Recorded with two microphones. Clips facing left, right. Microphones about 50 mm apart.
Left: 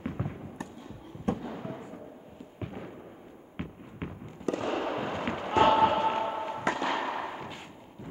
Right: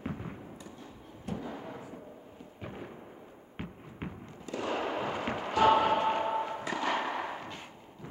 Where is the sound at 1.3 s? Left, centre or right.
Left.